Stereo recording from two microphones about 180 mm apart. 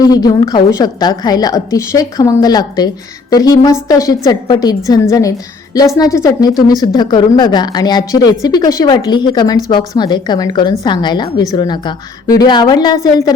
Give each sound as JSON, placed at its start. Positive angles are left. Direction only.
{"t": 0.0, "sound": "a woman's voice", "side_deg": 20}